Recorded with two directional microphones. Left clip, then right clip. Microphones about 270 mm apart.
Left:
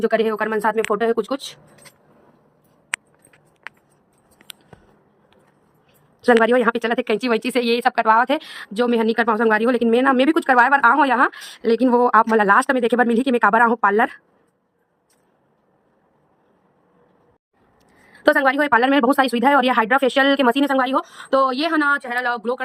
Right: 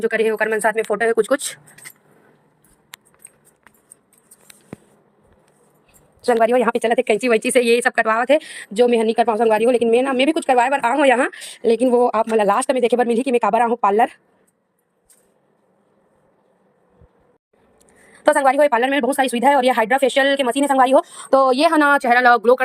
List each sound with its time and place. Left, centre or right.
0.1 s speech: centre
6.2 s speech: centre
17.8 s speech: centre
20.7 s speech: centre
22.1 s speech: centre